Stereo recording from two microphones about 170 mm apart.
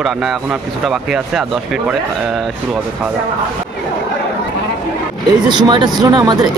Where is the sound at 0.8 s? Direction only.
Centre (ahead or behind).